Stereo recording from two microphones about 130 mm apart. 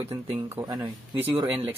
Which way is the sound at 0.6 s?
35° right (ahead or behind).